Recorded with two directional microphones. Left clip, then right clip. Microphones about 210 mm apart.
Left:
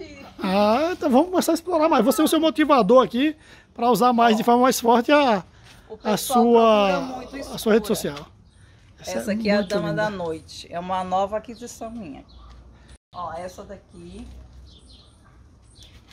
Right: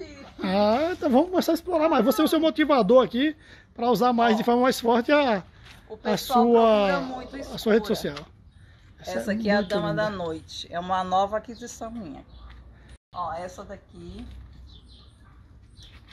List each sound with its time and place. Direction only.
0.2 s speech: 5° left (ahead or behind)
9.3 s speech: 15° left (ahead or behind)